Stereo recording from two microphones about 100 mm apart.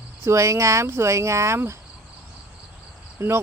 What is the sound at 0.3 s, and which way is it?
Speech, 30° right (ahead or behind).